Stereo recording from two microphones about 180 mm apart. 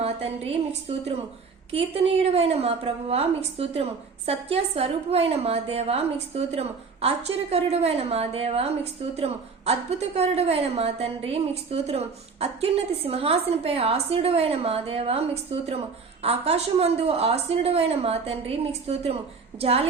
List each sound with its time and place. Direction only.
0.0 s a woman's voice: 35° right (ahead or behind)
1.7 s a woman's voice: 35° right (ahead or behind)